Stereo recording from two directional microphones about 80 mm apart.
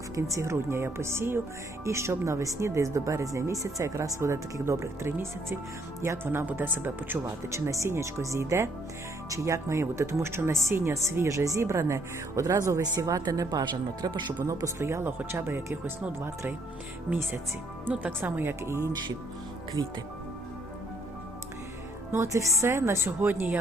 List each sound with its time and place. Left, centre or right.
0.2 s speech: right
7.5 s speech: right
13.5 s speech: right
14.8 s speech: right
17.9 s speech: right
22.1 s speech: right